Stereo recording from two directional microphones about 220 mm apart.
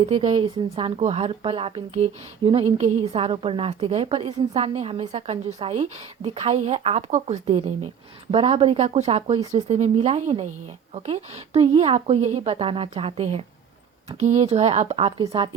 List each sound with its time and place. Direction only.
0.0 s a woman's voice: 25° right (ahead or behind)